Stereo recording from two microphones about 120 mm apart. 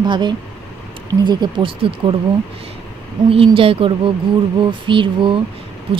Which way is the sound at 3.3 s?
50° right (ahead or behind).